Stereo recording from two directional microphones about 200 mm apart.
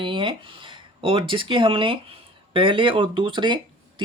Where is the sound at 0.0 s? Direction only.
25° right (ahead or behind).